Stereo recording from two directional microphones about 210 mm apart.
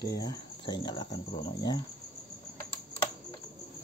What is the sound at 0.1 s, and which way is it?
Speech, 20° left (ahead or behind).